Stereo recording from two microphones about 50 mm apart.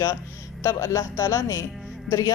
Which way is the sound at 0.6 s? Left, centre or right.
Left.